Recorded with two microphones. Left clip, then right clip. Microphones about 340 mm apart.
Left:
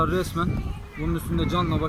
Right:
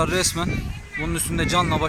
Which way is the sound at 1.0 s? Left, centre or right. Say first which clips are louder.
Right 3 dB; right.